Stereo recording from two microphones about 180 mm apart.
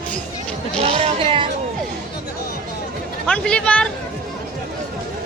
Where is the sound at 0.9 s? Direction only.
30° right (ahead or behind).